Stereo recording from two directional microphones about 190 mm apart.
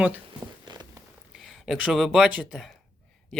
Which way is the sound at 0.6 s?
20° right (ahead or behind).